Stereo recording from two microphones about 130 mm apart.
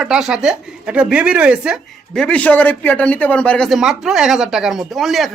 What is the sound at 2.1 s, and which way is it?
Speech, 10° left (ahead or behind).